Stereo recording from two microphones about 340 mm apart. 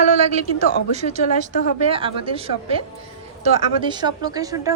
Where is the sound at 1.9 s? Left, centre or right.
Centre.